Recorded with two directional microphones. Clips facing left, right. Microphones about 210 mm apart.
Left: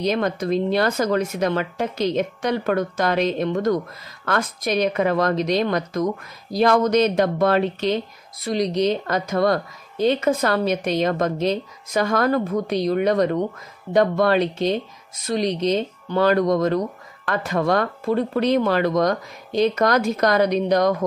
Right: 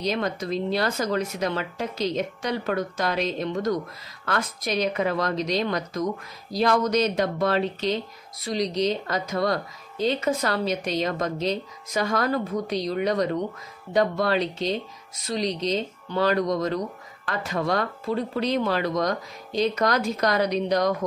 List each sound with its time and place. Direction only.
0.0 s speech: 50° left (ahead or behind)